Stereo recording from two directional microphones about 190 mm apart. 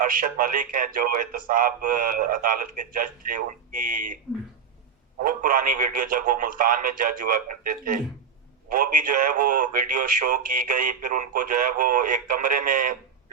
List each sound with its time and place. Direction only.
0.1 s speech: 45° right (ahead or behind)
5.2 s speech: 45° right (ahead or behind)